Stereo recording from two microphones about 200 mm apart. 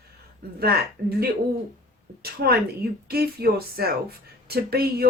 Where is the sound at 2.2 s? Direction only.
50° right (ahead or behind).